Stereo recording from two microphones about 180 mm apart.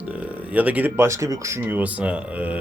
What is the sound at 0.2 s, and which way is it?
Speech, 10° right (ahead or behind).